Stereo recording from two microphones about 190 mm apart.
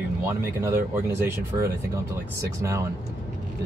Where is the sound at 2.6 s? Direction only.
15° right (ahead or behind).